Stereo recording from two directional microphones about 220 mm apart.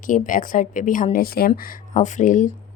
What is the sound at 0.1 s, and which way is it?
A woman's voice, 35° left (ahead or behind).